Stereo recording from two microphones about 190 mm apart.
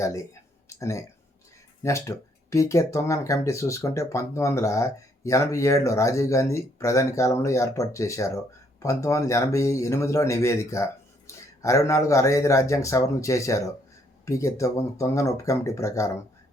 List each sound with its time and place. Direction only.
0.0 s speech: 15° left (ahead or behind)